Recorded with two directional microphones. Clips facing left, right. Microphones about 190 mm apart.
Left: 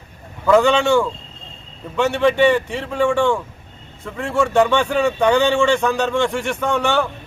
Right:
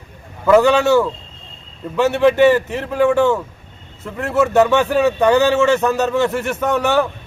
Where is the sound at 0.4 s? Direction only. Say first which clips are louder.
Right 2 dB; 5° right (ahead or behind).